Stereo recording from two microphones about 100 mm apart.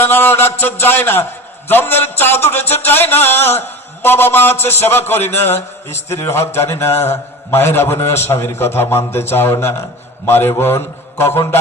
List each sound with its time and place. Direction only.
0.0 s a man's voice: 20° left (ahead or behind)
2.8 s mantra: 20° left (ahead or behind)